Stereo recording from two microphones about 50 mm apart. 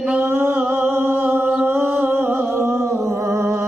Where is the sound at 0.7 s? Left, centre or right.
Right.